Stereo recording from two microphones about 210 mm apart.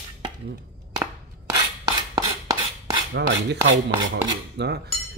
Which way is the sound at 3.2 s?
60° right (ahead or behind).